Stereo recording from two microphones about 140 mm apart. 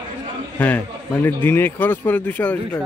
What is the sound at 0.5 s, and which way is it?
A man's voice, 10° left (ahead or behind).